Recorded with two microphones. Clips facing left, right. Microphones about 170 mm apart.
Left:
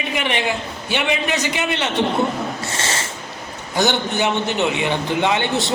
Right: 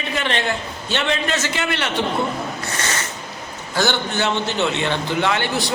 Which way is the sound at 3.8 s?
15° left (ahead or behind).